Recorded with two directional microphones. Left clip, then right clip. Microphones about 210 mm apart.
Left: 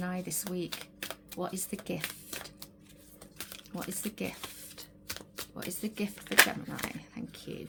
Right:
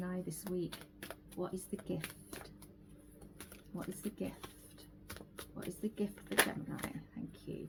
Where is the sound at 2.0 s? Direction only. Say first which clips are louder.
Left 8 dB; 10° left (ahead or behind).